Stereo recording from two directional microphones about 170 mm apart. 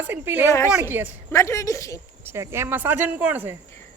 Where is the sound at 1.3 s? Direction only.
15° left (ahead or behind).